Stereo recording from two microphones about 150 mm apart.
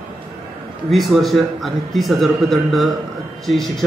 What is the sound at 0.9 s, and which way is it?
A man's voice, centre (ahead or behind).